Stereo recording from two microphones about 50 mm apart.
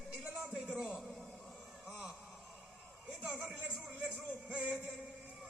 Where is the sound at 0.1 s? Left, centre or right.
Centre.